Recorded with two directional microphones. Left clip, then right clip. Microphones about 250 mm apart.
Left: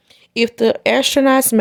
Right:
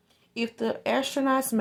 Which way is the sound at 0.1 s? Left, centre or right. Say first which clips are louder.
Left 14 dB; left.